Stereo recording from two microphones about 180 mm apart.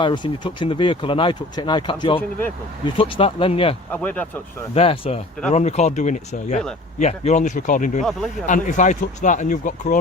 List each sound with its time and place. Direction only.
0.0 s speech: 25° left (ahead or behind)
3.9 s speech: 10° left (ahead or behind)
4.7 s speech: 35° left (ahead or behind)